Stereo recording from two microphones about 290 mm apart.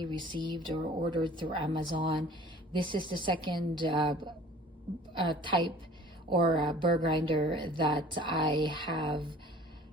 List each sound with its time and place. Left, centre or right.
0.0 s speech: centre